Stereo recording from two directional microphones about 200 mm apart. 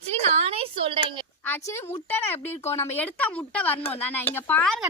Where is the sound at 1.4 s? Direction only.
10° left (ahead or behind).